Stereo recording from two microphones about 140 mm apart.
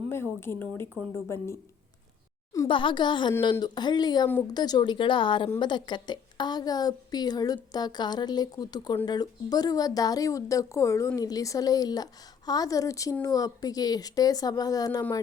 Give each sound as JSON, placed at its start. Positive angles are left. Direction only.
{"t": 0.1, "sound": "a woman's voice", "side_deg": 15}
{"t": 2.6, "sound": "a woman's voice", "side_deg": 35}